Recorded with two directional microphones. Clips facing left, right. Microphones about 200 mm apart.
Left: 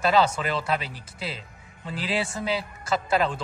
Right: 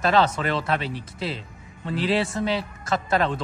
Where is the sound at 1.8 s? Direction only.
Centre (ahead or behind).